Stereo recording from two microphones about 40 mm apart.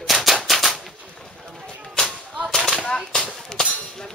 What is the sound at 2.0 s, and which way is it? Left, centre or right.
Whip, centre.